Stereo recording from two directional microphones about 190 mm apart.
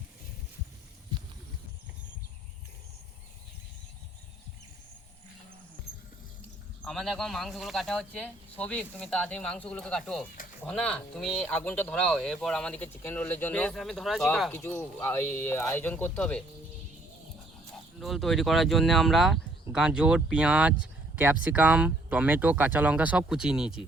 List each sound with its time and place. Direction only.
6.8 s speech: centre (ahead or behind)
18.0 s speech: centre (ahead or behind)